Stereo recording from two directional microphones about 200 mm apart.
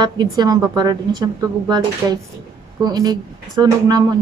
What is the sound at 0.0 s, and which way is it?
Speech, 20° right (ahead or behind).